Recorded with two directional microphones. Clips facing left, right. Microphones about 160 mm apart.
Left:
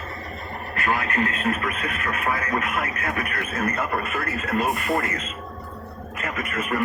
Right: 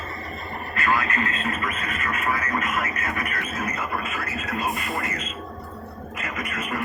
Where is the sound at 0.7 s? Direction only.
60° left (ahead or behind).